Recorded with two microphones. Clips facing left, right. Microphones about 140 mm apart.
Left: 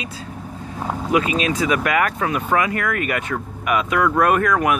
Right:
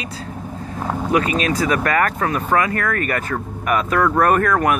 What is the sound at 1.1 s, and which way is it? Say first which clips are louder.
Speech: even; 20° left (ahead or behind).